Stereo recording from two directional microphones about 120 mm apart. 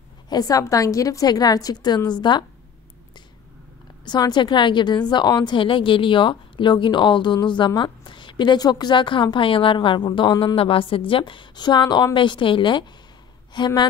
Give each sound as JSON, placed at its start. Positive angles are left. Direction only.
{"t": 0.3, "sound": "a woman's voice", "side_deg": 30}
{"t": 4.0, "sound": "a woman's voice", "side_deg": 35}